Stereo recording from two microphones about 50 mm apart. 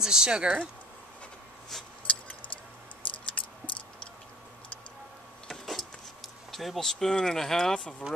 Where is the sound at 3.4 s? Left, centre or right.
Left.